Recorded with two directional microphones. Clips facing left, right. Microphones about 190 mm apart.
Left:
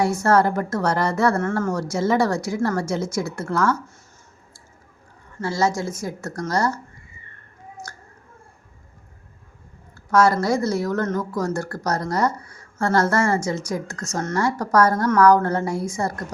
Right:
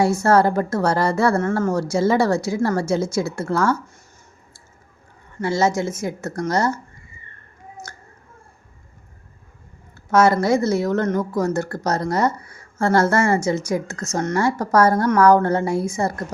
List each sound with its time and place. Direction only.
0.0 s a woman's voice: 25° right (ahead or behind)
5.5 s a woman's voice: 25° right (ahead or behind)
7.9 s a sound: 20° right (ahead or behind)
10.1 s a woman's voice: 25° right (ahead or behind)